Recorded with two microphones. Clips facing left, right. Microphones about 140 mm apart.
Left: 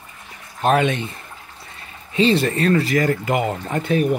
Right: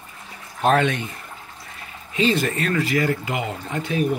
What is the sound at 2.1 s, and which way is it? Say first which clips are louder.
Speech: left 4 dB; 30° left (ahead or behind).